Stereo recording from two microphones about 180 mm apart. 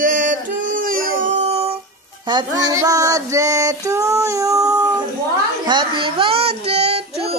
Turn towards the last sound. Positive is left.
turn(degrees=-35)  # may be behind; listen again after turning